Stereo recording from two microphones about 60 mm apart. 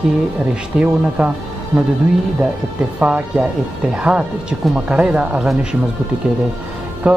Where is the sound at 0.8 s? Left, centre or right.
Centre.